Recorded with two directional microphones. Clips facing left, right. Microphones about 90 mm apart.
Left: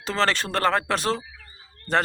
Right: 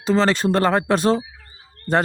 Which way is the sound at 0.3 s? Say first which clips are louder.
Right 5 dB; 20° right (ahead or behind).